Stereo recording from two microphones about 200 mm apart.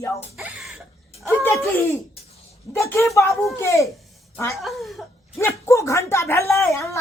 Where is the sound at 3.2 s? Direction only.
15° left (ahead or behind).